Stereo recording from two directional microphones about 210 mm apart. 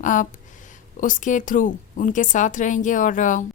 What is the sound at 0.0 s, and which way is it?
A woman's voice, 40° left (ahead or behind).